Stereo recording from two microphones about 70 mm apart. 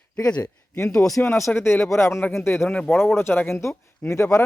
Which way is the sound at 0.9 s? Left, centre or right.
Centre.